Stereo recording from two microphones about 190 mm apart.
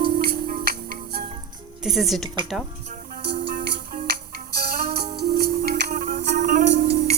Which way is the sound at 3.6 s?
60° right (ahead or behind).